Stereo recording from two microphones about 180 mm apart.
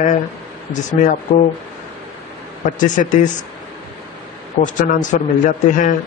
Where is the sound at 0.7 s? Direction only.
45° left (ahead or behind).